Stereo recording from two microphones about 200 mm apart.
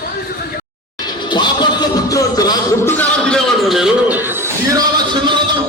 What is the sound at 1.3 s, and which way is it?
Music, 20° left (ahead or behind).